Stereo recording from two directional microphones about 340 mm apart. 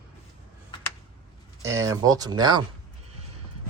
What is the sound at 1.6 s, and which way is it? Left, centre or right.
Speech, centre.